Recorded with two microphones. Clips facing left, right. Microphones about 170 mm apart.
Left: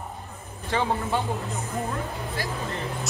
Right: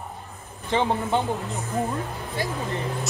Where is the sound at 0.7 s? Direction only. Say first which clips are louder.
Right 3 dB; 20° right (ahead or behind).